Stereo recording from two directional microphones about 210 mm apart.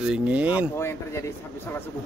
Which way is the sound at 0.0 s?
5° right (ahead or behind).